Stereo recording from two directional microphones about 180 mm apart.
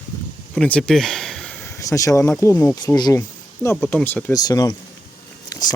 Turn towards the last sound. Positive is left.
turn(degrees=20)  # may be behind; listen again after turning